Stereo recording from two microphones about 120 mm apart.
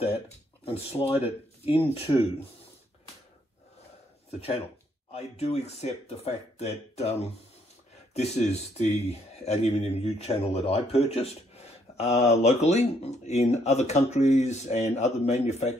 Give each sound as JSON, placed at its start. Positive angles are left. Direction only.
{"t": 0.7, "sound": "speech", "side_deg": 55}
{"t": 5.1, "sound": "a man's voice", "side_deg": 60}